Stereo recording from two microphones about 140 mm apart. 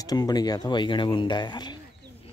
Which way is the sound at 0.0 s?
25° left (ahead or behind).